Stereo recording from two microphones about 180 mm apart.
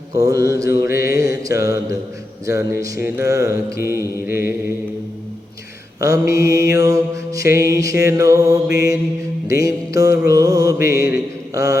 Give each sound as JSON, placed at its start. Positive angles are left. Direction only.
{"t": 0.1, "sound": "mantra", "side_deg": -20}
{"t": 6.0, "sound": "mantra", "side_deg": -15}
{"t": 10.8, "sound": "a man's voice", "side_deg": 60}
{"t": 11.5, "sound": "mantra", "side_deg": -20}